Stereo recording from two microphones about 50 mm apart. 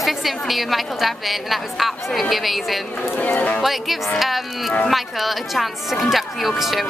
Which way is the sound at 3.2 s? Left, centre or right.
Left.